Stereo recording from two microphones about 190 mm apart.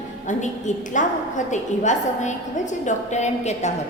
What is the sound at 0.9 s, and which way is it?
A woman's voice, 40° left (ahead or behind).